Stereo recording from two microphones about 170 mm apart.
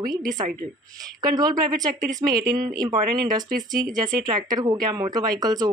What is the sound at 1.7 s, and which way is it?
Speech, 50° right (ahead or behind).